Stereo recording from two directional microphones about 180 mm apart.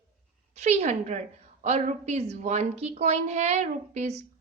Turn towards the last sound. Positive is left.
turn(degrees=-40)  # may be behind; listen again after turning